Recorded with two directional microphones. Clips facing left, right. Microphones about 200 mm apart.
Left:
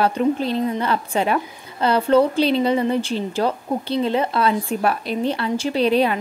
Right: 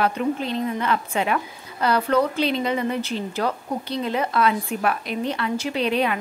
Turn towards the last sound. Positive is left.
turn(degrees=35)  # may be behind; listen again after turning